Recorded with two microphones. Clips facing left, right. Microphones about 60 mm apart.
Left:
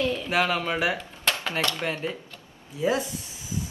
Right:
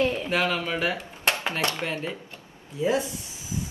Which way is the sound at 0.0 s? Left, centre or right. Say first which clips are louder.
Right 2 dB; right.